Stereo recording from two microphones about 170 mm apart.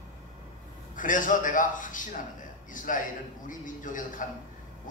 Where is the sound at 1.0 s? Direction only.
50° left (ahead or behind).